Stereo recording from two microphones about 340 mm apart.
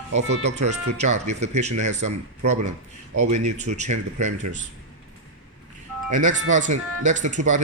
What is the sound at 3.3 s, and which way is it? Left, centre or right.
Speech, centre.